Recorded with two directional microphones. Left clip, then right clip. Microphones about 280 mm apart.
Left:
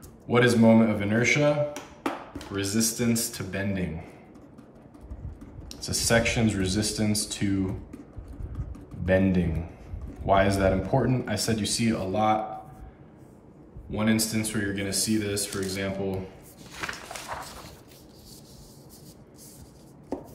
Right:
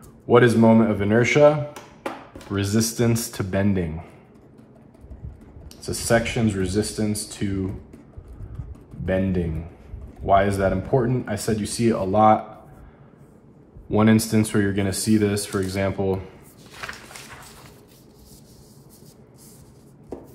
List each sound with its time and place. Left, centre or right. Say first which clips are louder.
0.3 s a man's voice: right 5 dB; centre
2.5 s a man's voice: right 4 dB; centre
6.0 s a man's voice: right 3 dB; centre
9.0 s a man's voice: even; centre
13.8 s a man's voice: right 7 dB; centre